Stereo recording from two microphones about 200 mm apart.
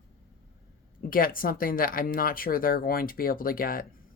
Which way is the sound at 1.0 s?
45° left (ahead or behind).